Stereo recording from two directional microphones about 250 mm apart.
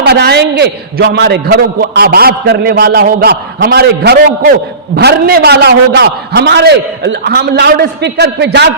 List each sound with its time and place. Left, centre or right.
0.0 s a man's voice: right